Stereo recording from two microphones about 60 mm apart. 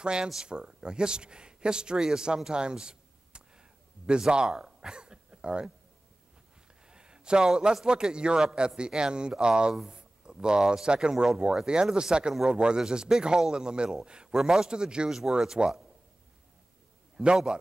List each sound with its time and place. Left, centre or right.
0.0 s a man's voice: centre
6.9 s speech: centre
17.2 s speech: centre